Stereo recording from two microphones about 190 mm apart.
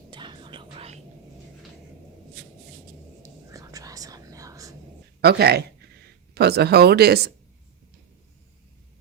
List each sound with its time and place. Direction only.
0.1 s music: 25° right (ahead or behind)
3.2 s whispering: 15° right (ahead or behind)
5.2 s speech: 55° right (ahead or behind)